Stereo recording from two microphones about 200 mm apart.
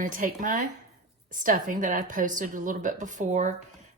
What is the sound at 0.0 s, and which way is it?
A woman's voice, 40° right (ahead or behind).